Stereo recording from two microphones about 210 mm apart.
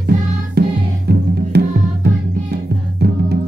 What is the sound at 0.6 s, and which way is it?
Music, 50° right (ahead or behind).